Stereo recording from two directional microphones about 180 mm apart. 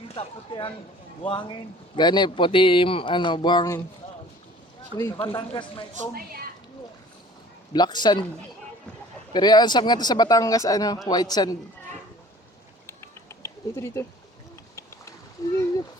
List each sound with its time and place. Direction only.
0.1 s speech: 30° left (ahead or behind)
4.9 s speech: 20° left (ahead or behind)
7.7 s speech: 25° left (ahead or behind)
9.3 s speech: 25° left (ahead or behind)
12.9 s a sound: 15° left (ahead or behind)